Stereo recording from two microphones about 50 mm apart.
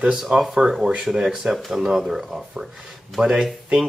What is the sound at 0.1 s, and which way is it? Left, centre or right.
Speech, centre.